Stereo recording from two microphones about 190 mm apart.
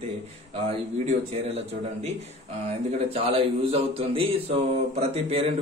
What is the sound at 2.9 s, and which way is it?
A man's voice, 30° right (ahead or behind).